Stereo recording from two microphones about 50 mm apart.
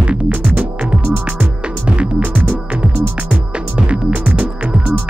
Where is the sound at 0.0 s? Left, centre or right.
Right.